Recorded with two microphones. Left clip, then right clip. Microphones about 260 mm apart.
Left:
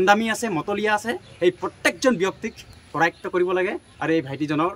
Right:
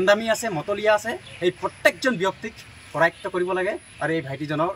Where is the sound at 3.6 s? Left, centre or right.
Centre.